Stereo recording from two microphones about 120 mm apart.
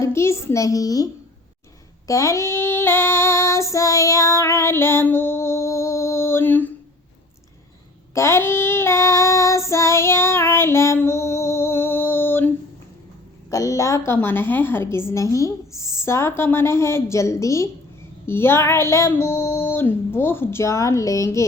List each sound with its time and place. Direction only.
0.0 s a child's voice: 20° left (ahead or behind)
2.0 s child singing: 25° left (ahead or behind)
8.1 s child singing: 20° left (ahead or behind)
13.5 s a woman's voice: 30° left (ahead or behind)